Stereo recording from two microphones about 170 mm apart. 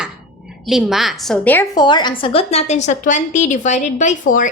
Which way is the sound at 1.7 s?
25° left (ahead or behind).